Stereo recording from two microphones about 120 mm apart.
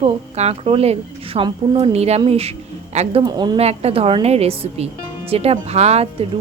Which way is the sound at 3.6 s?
60° right (ahead or behind).